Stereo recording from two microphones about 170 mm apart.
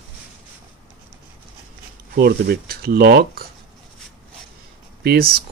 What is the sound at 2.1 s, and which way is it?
Speech, 65° right (ahead or behind).